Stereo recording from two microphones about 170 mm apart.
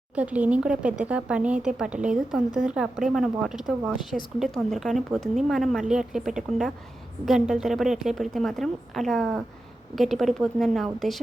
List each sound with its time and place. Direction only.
0.2 s a woman's voice: 10° right (ahead or behind)